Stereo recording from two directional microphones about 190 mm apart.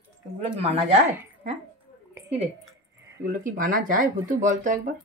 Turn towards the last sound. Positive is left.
turn(degrees=-40)  # may be behind; listen again after turning